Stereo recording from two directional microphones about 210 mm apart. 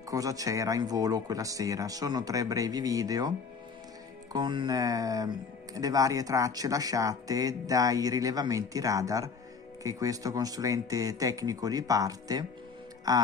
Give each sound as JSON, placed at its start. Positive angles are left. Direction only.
{"t": 0.1, "sound": "speech", "side_deg": -15}